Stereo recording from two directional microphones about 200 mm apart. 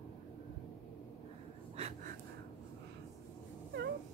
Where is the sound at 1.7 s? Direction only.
30° right (ahead or behind).